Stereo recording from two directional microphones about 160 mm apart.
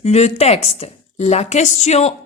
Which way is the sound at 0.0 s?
40° left (ahead or behind).